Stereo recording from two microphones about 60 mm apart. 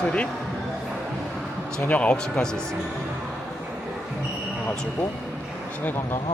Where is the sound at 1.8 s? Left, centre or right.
Left.